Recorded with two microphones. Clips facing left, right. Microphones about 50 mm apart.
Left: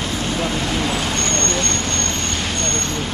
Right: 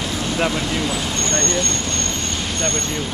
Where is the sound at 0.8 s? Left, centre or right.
Left.